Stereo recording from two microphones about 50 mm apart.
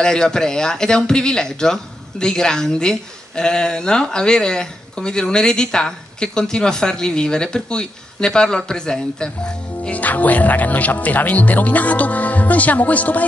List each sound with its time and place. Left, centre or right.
0.0 s speech: centre
9.9 s speech: left